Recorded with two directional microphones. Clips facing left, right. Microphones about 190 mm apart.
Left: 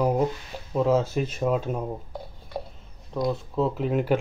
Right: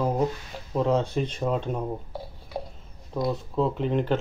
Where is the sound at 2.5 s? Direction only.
Centre (ahead or behind).